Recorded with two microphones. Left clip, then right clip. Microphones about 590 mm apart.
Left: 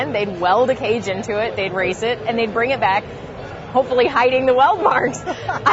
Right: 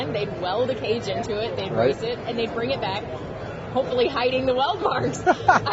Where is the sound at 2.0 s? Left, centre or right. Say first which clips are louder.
Left 7 dB; left.